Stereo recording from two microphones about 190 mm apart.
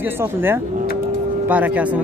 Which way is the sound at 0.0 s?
10° right (ahead or behind).